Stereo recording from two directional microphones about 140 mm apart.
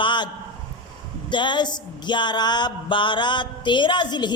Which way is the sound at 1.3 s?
35° left (ahead or behind).